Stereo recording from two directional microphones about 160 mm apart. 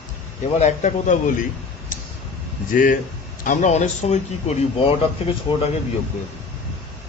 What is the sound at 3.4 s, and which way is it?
Speech, 50° left (ahead or behind).